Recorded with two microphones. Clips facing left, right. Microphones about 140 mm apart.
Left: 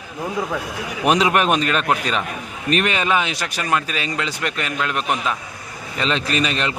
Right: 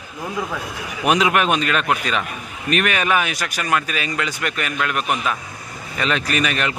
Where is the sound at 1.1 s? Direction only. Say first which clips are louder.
Even; 35° left (ahead or behind).